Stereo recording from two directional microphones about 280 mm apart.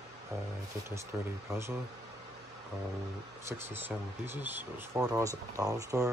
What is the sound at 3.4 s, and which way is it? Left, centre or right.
Speech, centre.